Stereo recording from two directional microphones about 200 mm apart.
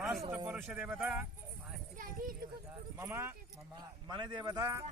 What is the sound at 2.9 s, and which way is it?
Speech, 10° right (ahead or behind).